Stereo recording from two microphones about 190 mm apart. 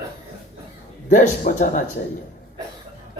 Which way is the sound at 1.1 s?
40° left (ahead or behind).